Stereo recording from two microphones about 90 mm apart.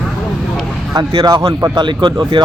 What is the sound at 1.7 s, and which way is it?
Speech, 60° right (ahead or behind).